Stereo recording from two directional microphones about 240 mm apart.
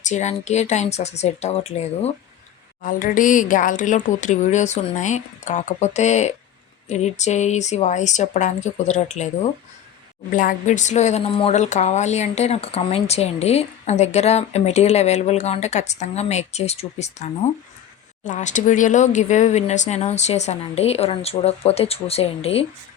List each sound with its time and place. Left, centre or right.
0.0 s a woman's voice: left
18.3 s a woman's voice: left